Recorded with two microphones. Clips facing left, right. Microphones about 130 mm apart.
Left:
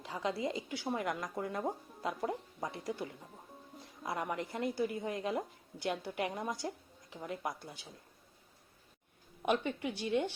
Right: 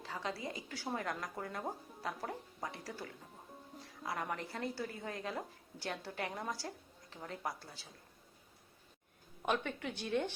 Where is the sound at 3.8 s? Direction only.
20° left (ahead or behind).